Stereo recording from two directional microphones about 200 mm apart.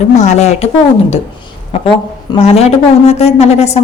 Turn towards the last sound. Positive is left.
turn(degrees=35)  # may be behind; listen again after turning